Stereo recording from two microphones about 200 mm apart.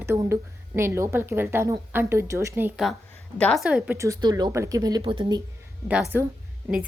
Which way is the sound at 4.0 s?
15° right (ahead or behind).